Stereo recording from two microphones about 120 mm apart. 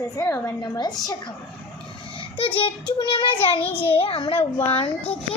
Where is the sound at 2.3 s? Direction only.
50° left (ahead or behind).